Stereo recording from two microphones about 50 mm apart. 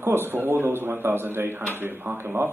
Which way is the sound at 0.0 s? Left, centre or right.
Right.